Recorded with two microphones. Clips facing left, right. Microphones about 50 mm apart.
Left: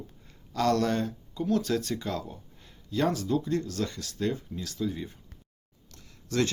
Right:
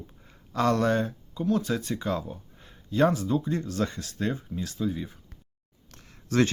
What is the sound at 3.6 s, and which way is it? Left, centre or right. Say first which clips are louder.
Speech: right 3 dB; right.